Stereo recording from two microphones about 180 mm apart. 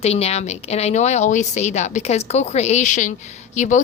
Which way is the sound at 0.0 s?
35° left (ahead or behind).